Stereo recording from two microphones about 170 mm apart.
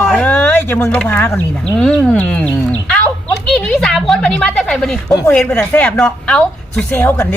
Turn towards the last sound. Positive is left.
turn(degrees=10)  # may be behind; listen again after turning